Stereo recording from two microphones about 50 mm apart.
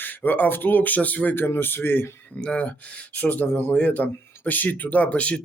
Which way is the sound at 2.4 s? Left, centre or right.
Left.